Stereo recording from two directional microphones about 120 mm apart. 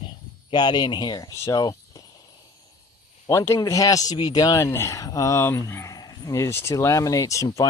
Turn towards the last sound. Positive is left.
turn(degrees=25)  # may be behind; listen again after turning